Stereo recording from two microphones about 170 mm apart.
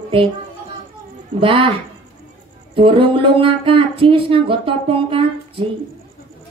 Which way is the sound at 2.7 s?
30° right (ahead or behind).